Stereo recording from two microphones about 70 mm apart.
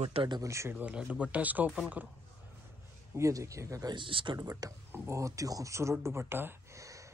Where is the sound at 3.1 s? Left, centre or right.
Right.